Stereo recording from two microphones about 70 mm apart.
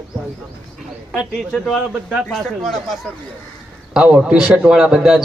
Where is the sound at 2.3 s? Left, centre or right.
Centre.